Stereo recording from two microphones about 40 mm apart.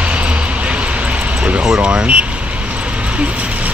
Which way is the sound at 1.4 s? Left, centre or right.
Right.